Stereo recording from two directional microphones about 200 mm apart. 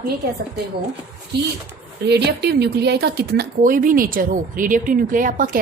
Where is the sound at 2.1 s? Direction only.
55° right (ahead or behind).